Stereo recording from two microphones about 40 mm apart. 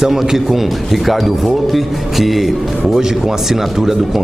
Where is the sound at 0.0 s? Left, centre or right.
Centre.